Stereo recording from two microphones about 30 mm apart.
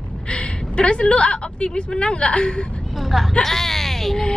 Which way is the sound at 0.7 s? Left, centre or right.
Left.